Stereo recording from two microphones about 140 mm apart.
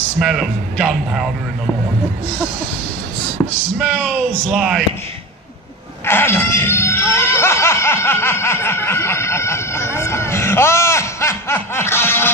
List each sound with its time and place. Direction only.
0.2 s speech: centre (ahead or behind)
4.5 s speech: 5° right (ahead or behind)
6.0 s a sound: 15° left (ahead or behind)